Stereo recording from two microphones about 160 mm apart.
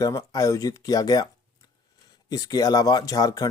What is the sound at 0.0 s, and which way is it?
Speech, 20° left (ahead or behind).